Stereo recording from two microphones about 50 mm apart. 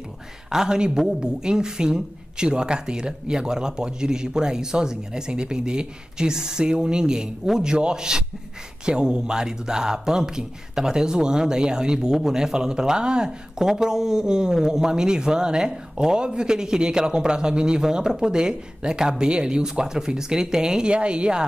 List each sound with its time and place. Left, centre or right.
0.5 s speech: centre